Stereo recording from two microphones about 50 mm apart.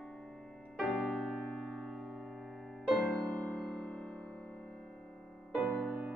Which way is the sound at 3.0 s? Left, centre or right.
Left.